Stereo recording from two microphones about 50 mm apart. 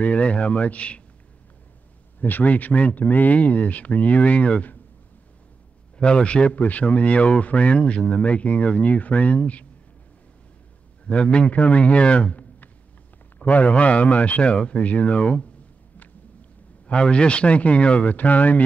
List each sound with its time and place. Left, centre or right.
0.0 s a man's voice: left
2.1 s speech: left
5.9 s speech: centre
11.1 s speech: left
16.8 s speech: centre